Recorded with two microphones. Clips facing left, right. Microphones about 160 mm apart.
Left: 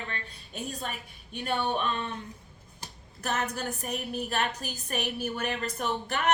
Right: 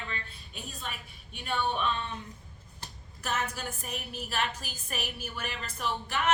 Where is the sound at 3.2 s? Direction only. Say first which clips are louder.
Left 3 dB; 40° left (ahead or behind).